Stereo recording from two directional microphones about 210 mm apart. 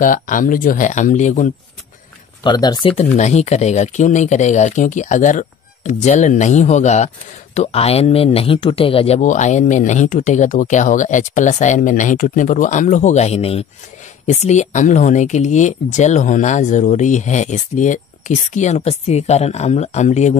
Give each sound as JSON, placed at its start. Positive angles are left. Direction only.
{"t": 0.0, "sound": "speech", "side_deg": 40}
{"t": 2.4, "sound": "speech", "side_deg": 20}